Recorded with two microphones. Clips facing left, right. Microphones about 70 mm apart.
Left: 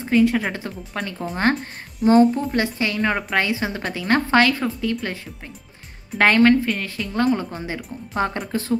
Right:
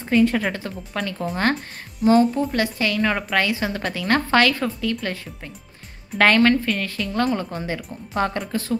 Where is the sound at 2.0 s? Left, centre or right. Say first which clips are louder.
Left 2 dB; left.